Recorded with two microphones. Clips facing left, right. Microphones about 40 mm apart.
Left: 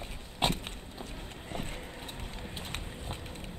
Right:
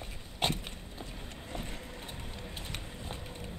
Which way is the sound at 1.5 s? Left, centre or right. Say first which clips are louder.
Left 2 dB; left.